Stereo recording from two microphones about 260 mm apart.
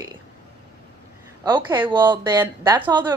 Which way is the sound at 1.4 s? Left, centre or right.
Centre.